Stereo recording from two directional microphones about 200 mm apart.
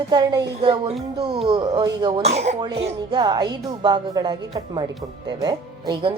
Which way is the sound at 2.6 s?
20° right (ahead or behind).